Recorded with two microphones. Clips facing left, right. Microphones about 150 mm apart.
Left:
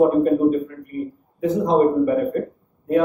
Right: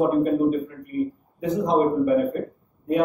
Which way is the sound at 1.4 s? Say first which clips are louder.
Left 4 dB; 20° right (ahead or behind).